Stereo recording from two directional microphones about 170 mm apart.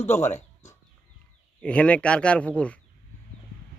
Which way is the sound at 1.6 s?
5° left (ahead or behind).